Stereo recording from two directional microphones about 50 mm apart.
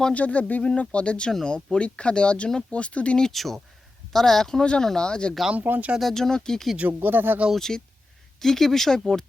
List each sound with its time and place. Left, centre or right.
0.1 s speech: left
3.3 s speech: centre
5.5 s speech: right
6.0 s speech: centre
6.7 s speech: right
7.5 s speech: centre